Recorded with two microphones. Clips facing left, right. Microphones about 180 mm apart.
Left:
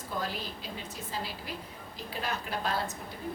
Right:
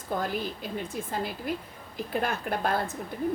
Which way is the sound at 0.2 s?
50° right (ahead or behind).